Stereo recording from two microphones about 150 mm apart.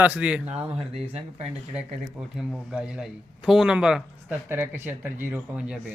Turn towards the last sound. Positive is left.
turn(degrees=-5)  # may be behind; listen again after turning